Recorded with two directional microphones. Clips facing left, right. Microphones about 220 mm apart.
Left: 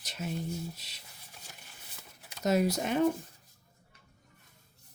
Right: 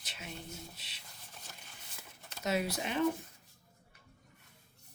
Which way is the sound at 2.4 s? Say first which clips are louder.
Left 6 dB; 40° left (ahead or behind).